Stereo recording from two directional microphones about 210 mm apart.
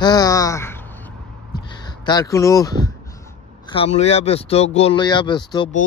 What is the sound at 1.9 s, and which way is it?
Speech, 20° left (ahead or behind).